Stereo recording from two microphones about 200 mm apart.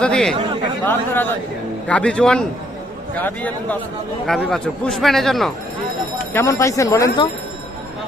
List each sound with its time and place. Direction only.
0.0 s speech: 5° left (ahead or behind)
6.3 s speech: 15° left (ahead or behind)